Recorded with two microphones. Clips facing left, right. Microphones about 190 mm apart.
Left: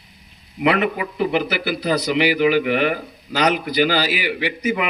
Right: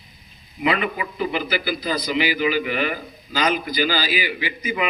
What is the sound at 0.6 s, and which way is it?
A man's voice, 65° left (ahead or behind).